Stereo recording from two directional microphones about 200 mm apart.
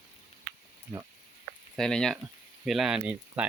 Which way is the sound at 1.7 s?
5° left (ahead or behind).